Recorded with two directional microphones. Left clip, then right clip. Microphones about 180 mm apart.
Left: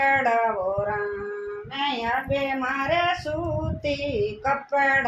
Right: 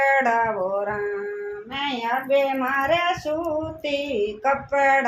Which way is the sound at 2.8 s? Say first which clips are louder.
Left 1 dB; 45° right (ahead or behind).